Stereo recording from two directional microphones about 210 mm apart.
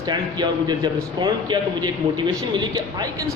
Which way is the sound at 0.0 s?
20° right (ahead or behind).